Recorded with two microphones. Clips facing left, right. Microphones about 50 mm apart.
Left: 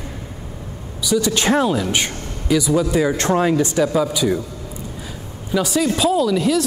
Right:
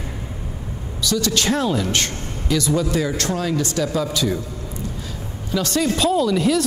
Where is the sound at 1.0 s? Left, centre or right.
Centre.